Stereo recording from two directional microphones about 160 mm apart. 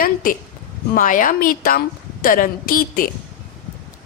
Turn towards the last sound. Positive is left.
turn(degrees=60)  # may be behind; listen again after turning